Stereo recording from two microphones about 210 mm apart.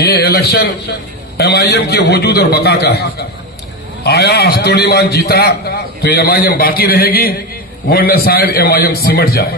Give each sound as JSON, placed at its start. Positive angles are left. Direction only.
{"t": 0.0, "sound": "a man's voice", "side_deg": 50}